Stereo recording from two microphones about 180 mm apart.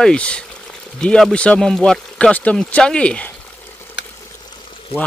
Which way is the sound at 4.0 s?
85° left.